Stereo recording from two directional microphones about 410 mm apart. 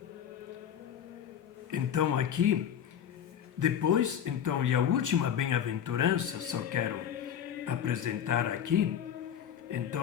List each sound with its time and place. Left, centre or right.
1.7 s speech: right
3.6 s speech: right